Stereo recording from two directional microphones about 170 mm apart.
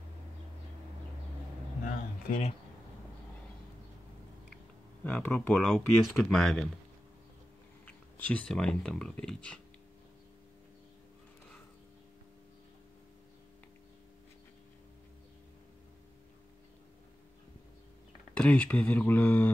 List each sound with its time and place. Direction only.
1.9 s a sound: 40° left (ahead or behind)
5.0 s speech: 10° left (ahead or behind)
7.8 s speech: 10° left (ahead or behind)
18.3 s speech: 5° left (ahead or behind)